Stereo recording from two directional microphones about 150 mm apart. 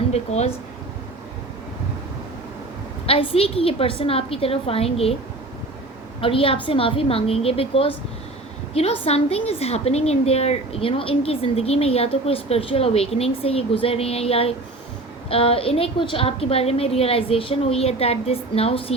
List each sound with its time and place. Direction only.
0.1 s speech: 45° left (ahead or behind)
3.1 s a woman's voice: 40° left (ahead or behind)
6.1 s a woman's voice: 40° left (ahead or behind)